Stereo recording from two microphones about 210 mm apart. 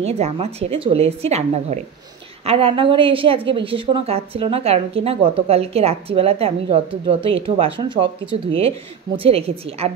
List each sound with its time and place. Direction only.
0.0 s a woman's voice: 30° right (ahead or behind)